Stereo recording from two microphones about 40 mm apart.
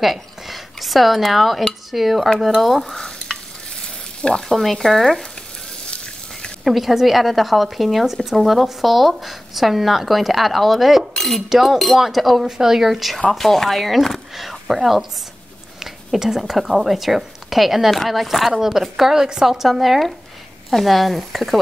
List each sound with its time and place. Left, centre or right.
0.0 s speech: centre
3.8 s frying: centre
4.6 s speech: centre
6.6 s speech: centre
11.1 s cutlery: centre
11.4 s speech: centre
12.4 s a woman's voice: centre